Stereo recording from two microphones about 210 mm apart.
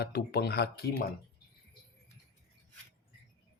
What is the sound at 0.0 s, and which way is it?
Speech, 45° left (ahead or behind).